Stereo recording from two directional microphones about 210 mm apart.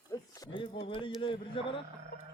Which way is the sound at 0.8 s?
25° left (ahead or behind).